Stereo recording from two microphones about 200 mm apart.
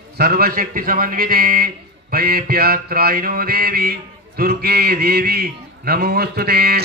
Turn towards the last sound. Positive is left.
turn(degrees=-50)  # may be behind; listen again after turning